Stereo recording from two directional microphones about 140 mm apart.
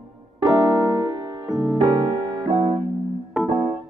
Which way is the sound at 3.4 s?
Centre (ahead or behind).